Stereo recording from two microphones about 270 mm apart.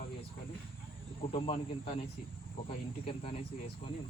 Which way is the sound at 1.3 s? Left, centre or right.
Left.